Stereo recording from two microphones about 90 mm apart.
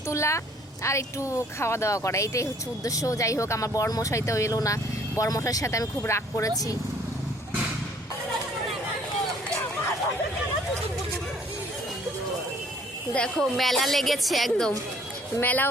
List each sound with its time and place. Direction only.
0.1 s speech: 30° left (ahead or behind)
13.1 s a woman's voice: 5° left (ahead or behind)
15.4 s speech: 20° left (ahead or behind)